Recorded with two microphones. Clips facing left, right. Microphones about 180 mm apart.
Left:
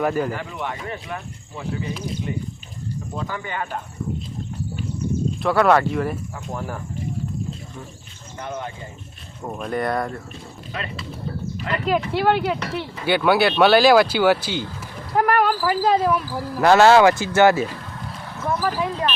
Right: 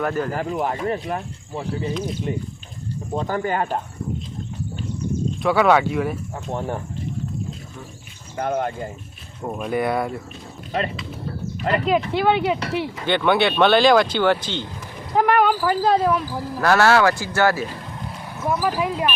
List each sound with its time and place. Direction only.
0.0 s speech: 10° left (ahead or behind)
0.3 s speech: 40° right (ahead or behind)
1.9 s speech: 5° left (ahead or behind)
3.1 s speech: 40° right (ahead or behind)
5.4 s speech: centre (ahead or behind)
6.5 s speech: 30° right (ahead or behind)
8.4 s speech: 55° right (ahead or behind)
9.4 s speech: 5° right (ahead or behind)
11.9 s speech: centre (ahead or behind)
16.6 s speech: 20° left (ahead or behind)
18.3 s speech: 10° right (ahead or behind)